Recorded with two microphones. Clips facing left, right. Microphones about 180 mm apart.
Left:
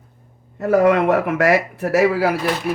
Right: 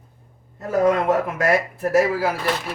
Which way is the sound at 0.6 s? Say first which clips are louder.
Left 4 dB; 70° left (ahead or behind).